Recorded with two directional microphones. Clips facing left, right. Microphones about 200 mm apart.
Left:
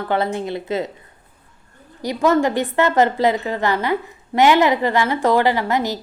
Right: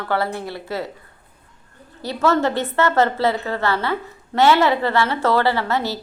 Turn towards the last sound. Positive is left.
turn(degrees=15)  # may be behind; listen again after turning